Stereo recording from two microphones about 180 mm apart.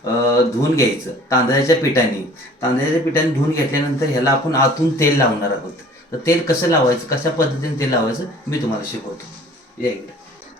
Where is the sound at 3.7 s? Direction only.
15° left (ahead or behind).